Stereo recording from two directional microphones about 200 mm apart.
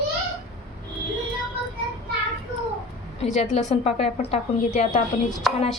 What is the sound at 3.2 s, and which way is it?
A woman's voice, 35° left (ahead or behind).